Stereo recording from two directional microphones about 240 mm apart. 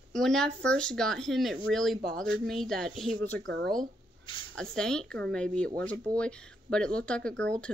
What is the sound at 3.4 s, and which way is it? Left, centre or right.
Speech, right.